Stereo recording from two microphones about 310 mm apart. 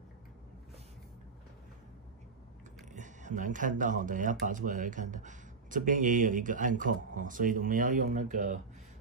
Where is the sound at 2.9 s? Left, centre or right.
Right.